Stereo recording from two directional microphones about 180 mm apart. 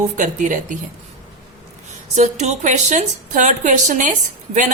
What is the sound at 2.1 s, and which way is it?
A woman's voice, 40° right (ahead or behind).